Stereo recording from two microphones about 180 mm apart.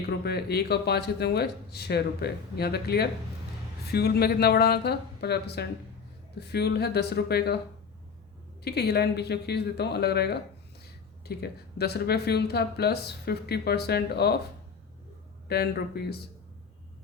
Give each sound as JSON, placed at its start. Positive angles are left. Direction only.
{"t": 0.0, "sound": "speech", "side_deg": 65}
{"t": 8.6, "sound": "speech", "side_deg": 65}
{"t": 15.4, "sound": "speech", "side_deg": 60}